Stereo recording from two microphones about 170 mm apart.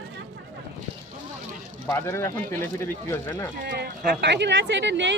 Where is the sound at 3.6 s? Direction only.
70° right (ahead or behind); by 5.1 s 90° right.